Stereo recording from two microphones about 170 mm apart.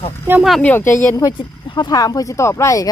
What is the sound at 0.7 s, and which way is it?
Speech, 15° left (ahead or behind).